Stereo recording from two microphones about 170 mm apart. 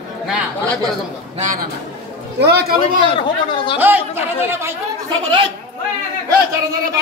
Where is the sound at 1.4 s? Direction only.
50° right (ahead or behind).